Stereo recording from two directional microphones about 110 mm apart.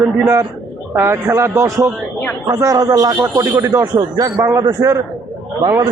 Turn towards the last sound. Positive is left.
turn(degrees=-30)  # may be behind; listen again after turning